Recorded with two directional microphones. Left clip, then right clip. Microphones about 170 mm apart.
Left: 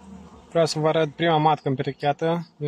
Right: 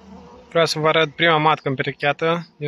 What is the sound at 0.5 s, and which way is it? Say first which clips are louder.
Speech: right 4 dB; 15° left (ahead or behind).